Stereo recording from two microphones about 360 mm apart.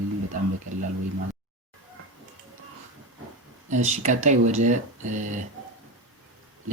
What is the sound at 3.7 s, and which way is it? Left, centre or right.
Speech, centre.